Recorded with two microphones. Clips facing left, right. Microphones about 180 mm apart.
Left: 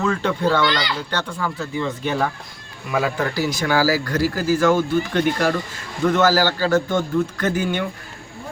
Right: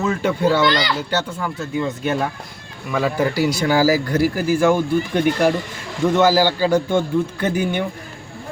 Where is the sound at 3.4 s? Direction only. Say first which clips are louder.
Right 2 dB; 15° right (ahead or behind).